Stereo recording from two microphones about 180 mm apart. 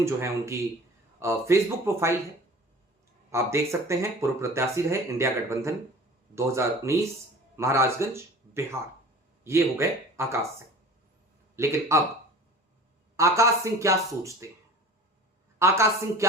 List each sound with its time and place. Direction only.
0.0 s speech: 15° right (ahead or behind)
3.2 s a man's voice: 15° right (ahead or behind)
13.1 s speech: 15° right (ahead or behind)
15.5 s speech: 15° right (ahead or behind)